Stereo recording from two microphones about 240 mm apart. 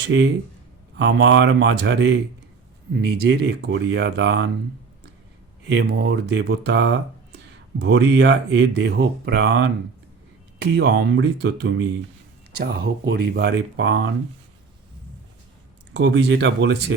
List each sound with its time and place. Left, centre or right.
0.1 s speech: right
5.6 s speech: right
16.0 s speech: right